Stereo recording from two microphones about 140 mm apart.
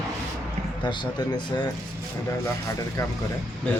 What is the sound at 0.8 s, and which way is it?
Speech, 35° left (ahead or behind).